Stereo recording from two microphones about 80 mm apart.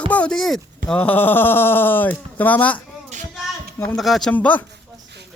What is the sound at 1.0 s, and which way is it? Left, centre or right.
Speech, left.